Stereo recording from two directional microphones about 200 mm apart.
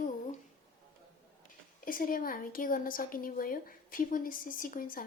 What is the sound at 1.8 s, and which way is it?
A woman's voice, 45° left (ahead or behind).